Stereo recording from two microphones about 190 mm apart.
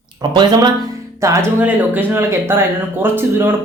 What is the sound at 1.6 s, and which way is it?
Speech, 10° right (ahead or behind).